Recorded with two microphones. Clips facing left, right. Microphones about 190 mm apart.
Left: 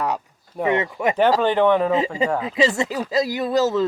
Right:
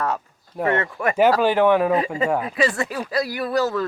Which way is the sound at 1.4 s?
5° right (ahead or behind).